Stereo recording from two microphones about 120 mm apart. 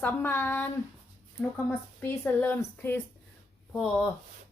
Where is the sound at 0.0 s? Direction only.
15° left (ahead or behind).